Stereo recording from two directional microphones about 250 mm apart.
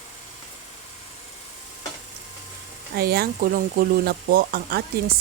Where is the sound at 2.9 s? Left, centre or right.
Right.